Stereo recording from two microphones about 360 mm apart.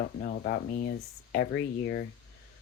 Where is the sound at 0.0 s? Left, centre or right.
Left.